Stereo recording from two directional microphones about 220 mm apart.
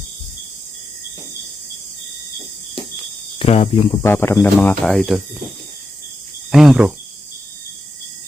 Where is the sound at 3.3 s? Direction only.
25° left (ahead or behind).